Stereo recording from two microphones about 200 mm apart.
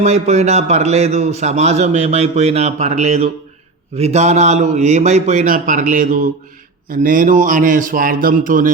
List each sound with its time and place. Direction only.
0.0 s a man's voice: 35° right (ahead or behind)